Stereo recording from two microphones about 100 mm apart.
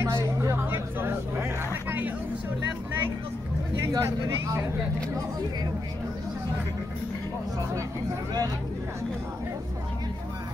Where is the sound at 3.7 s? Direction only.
35° right (ahead or behind).